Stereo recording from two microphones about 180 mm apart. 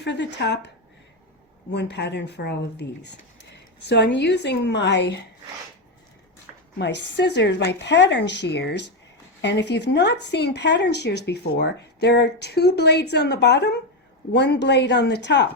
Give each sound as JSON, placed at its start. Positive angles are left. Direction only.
{"t": 0.0, "sound": "speech", "side_deg": 75}
{"t": 1.7, "sound": "speech", "side_deg": 70}
{"t": 6.7, "sound": "speech", "side_deg": 80}